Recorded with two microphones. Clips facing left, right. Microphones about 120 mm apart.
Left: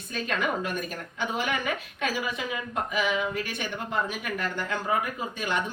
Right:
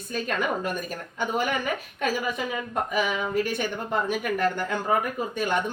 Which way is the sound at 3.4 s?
50° right (ahead or behind).